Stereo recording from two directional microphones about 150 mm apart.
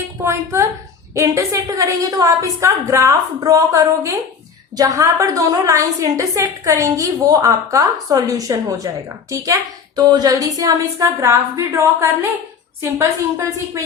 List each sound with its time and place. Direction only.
0.2 s a woman's voice: 20° right (ahead or behind)